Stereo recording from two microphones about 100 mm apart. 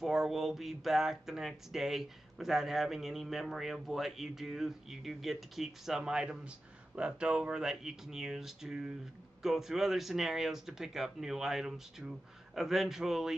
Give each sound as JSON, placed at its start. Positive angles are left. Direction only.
{"t": 0.0, "sound": "speech", "side_deg": -5}